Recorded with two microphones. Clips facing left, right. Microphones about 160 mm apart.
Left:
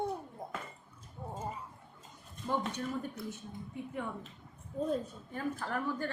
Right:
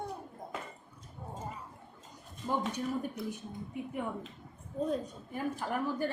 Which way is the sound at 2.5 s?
10° right (ahead or behind).